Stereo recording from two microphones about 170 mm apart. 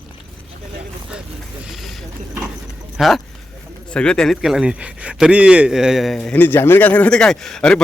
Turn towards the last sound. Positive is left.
turn(degrees=5)  # may be behind; listen again after turning